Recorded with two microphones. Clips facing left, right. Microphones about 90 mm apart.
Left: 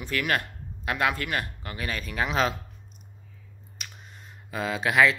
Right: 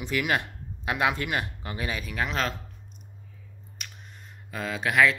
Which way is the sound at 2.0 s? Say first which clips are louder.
Left 5 dB; centre (ahead or behind).